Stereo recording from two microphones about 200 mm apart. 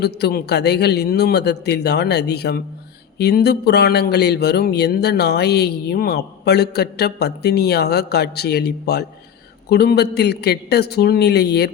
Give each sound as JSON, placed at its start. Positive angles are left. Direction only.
{"t": 0.0, "sound": "a man's voice", "side_deg": 55}